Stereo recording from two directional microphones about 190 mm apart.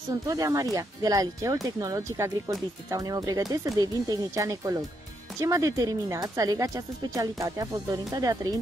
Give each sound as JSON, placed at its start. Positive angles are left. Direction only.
{"t": 0.1, "sound": "speech", "side_deg": -20}